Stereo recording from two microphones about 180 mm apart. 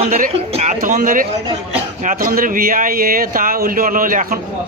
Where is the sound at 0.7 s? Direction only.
50° right (ahead or behind).